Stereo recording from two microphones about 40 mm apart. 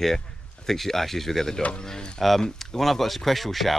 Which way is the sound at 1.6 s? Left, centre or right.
Left.